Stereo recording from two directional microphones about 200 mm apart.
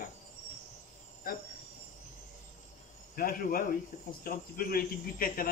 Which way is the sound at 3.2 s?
45° left (ahead or behind).